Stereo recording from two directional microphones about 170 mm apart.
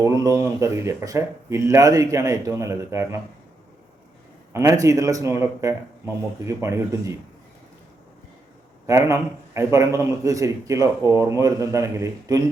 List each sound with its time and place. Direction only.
0.0 s speech: 20° right (ahead or behind)
4.5 s a man's voice: 20° right (ahead or behind)
8.9 s a man's voice: 20° right (ahead or behind)